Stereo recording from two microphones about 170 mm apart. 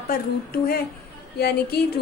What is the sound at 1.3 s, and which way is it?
Speech, 65° left (ahead or behind).